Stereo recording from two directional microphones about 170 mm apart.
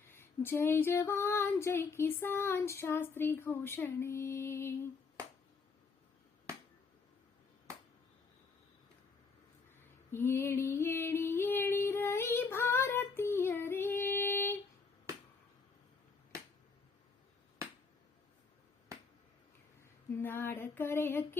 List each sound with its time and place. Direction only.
0.1 s child singing: 15° left (ahead or behind)
10.1 s female singing: 15° left (ahead or behind)
20.2 s child singing: 15° left (ahead or behind)